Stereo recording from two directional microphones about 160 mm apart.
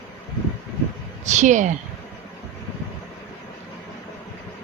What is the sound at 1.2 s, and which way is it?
Speech, 50° right (ahead or behind).